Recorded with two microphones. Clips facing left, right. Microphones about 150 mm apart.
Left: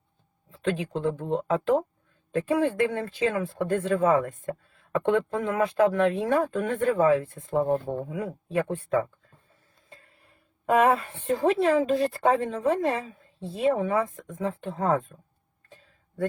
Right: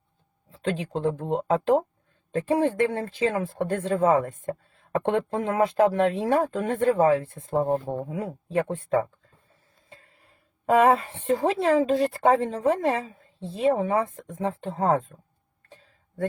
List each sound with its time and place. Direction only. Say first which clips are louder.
0.5 s speech: even; 35° right (ahead or behind)
10.7 s speech: right 2 dB; 30° right (ahead or behind)